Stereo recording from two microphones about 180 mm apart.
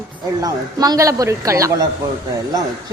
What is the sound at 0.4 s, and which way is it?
A woman's voice, 20° right (ahead or behind).